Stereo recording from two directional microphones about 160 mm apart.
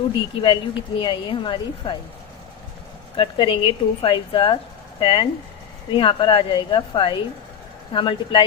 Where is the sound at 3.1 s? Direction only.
35° left (ahead or behind).